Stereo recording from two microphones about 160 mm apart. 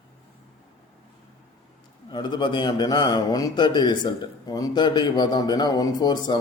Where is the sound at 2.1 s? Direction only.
25° left (ahead or behind).